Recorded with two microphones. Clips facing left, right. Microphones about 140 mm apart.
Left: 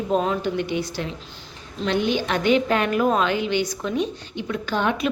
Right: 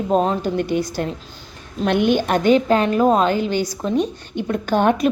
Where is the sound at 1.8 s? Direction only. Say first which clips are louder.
Right 5 dB; 60° right (ahead or behind).